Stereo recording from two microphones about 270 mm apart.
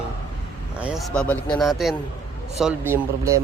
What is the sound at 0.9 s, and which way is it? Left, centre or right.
Speech, centre.